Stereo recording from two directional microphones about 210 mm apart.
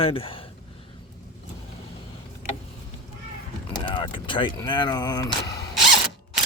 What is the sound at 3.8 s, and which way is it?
Speech, 20° left (ahead or behind).